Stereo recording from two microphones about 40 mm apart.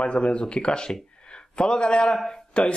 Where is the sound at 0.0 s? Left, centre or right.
Left.